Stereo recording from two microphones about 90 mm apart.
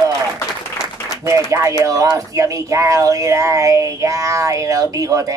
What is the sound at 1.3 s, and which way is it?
Speech, 35° right (ahead or behind).